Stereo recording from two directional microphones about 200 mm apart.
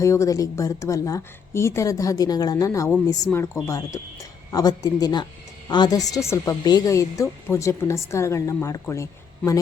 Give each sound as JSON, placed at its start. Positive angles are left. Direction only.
{"t": 0.0, "sound": "a woman's voice", "side_deg": 15}